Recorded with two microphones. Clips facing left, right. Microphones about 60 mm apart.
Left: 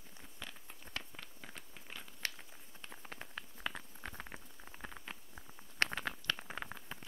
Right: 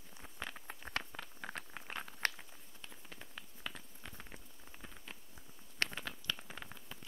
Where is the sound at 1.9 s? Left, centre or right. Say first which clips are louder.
Right 5 dB; right.